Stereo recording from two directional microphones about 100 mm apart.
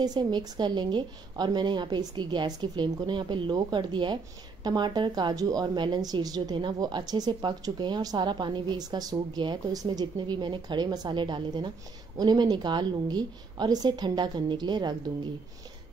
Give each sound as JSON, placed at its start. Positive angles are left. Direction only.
{"t": 0.0, "sound": "speech", "side_deg": -45}